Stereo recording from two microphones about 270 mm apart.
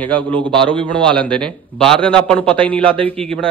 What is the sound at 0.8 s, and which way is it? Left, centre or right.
A man's voice, centre.